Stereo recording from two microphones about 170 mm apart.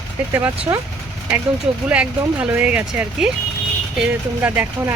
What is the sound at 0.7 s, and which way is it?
Speech, 15° right (ahead or behind).